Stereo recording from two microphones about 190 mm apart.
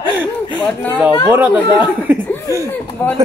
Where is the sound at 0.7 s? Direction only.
5° left (ahead or behind).